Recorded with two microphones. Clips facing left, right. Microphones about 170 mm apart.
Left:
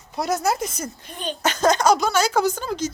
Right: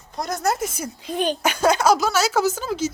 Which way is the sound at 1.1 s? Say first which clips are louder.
Right 10 dB; 90° right.